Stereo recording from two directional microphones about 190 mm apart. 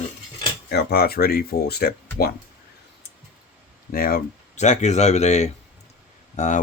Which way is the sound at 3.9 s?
50° left (ahead or behind).